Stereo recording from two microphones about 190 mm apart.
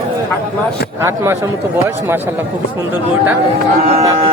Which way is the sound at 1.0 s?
15° right (ahead or behind).